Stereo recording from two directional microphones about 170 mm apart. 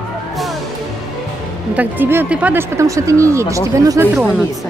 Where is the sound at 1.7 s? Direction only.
10° right (ahead or behind).